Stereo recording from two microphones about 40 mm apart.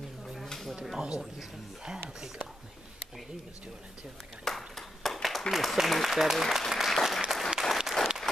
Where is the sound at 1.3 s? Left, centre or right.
Centre.